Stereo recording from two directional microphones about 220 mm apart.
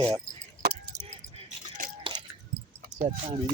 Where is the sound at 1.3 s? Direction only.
35° right (ahead or behind).